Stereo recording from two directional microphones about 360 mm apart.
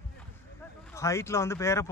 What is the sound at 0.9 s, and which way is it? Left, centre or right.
Speech, centre.